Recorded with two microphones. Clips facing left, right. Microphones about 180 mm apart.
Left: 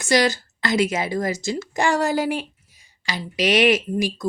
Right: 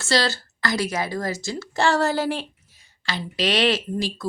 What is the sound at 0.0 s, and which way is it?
A woman's voice, 15° left (ahead or behind).